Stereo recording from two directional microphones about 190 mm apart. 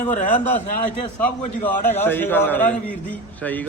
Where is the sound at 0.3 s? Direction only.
10° left (ahead or behind).